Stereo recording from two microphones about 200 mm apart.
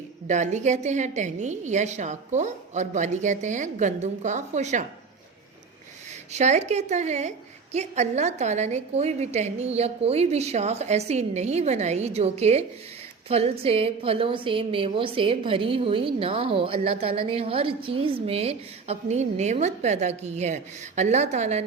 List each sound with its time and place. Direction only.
0.3 s a woman's voice: 35° right (ahead or behind)
6.3 s a woman's voice: 35° right (ahead or behind)